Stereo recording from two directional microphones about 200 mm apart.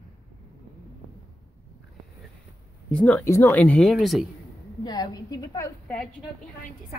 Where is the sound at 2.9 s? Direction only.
5° left (ahead or behind).